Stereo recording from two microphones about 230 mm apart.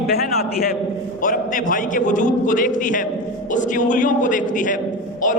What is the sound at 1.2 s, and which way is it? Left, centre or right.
A man's voice, left.